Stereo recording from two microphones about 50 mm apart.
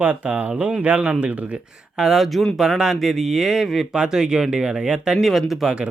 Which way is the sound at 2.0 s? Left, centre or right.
Centre.